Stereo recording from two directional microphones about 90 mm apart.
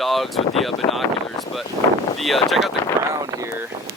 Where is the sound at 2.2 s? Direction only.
Centre (ahead or behind).